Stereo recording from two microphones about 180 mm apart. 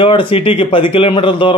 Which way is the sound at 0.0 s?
30° left (ahead or behind).